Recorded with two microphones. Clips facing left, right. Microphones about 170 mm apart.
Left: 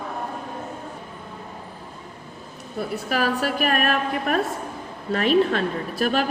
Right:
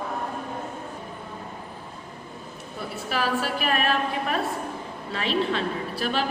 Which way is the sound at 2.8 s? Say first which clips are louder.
Left 4 dB; 45° left (ahead or behind).